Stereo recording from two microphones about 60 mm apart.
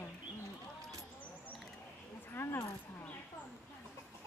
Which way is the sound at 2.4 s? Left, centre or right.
Left.